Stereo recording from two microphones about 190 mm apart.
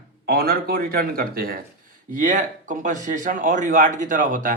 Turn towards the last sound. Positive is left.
turn(degrees=-45)  # may be behind; listen again after turning